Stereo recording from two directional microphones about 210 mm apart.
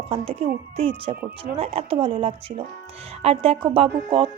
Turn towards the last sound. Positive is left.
turn(degrees=-25)  # may be behind; listen again after turning